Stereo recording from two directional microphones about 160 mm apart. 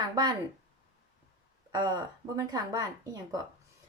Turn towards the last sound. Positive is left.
turn(degrees=-20)  # may be behind; listen again after turning